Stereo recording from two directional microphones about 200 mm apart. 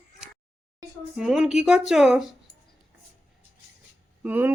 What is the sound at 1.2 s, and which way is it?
Speech, centre (ahead or behind).